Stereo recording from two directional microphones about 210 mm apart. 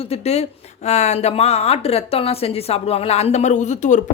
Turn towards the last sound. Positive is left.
turn(degrees=35)  # may be behind; listen again after turning